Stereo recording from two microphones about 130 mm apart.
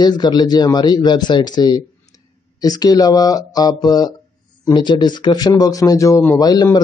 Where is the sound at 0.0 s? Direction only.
35° left (ahead or behind).